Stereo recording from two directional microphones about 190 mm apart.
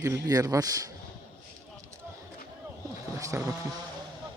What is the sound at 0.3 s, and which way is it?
Speech, 15° right (ahead or behind).